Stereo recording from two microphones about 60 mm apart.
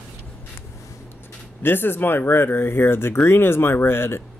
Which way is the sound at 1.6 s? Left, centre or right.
Left.